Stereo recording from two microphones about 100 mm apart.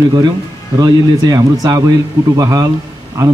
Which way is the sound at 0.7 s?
40° right (ahead or behind).